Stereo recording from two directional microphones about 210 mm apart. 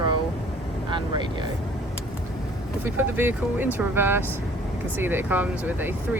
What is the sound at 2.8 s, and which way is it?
Speech, 10° right (ahead or behind).